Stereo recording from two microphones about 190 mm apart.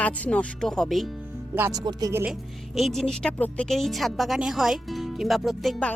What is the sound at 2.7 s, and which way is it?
Speech, centre (ahead or behind).